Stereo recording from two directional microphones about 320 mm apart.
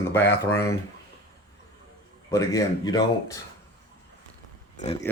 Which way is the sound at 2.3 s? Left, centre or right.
Centre.